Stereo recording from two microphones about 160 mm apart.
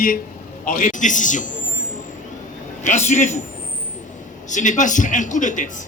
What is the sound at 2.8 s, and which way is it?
Speech, 45° left (ahead or behind).